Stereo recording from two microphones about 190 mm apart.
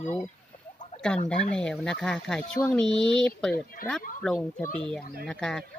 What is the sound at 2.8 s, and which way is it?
Speech, 25° right (ahead or behind).